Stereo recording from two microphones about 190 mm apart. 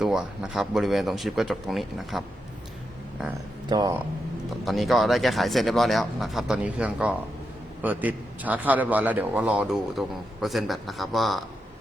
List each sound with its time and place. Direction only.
0.0 s speech: 5° right (ahead or behind)
3.7 s speech: 20° right (ahead or behind)
4.6 s a man's voice: centre (ahead or behind)